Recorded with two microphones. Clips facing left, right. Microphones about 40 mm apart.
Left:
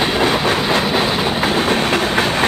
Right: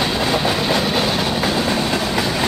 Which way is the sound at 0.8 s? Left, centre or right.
Centre.